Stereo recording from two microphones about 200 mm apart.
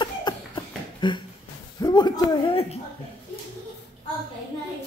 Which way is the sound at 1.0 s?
25° left (ahead or behind).